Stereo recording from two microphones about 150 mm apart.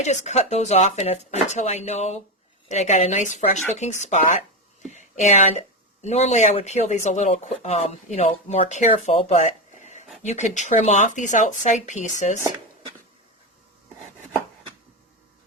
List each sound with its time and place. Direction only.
0.0 s speech: 50° left (ahead or behind)